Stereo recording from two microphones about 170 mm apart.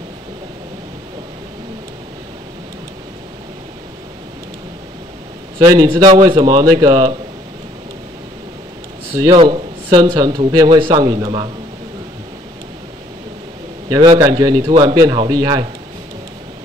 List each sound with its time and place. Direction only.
5.7 s a man's voice: 20° right (ahead or behind)
9.1 s a man's voice: 25° right (ahead or behind)
13.8 s a man's voice: 20° right (ahead or behind)